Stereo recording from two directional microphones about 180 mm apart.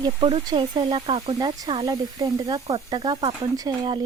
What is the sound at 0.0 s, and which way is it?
A woman's voice, 25° right (ahead or behind).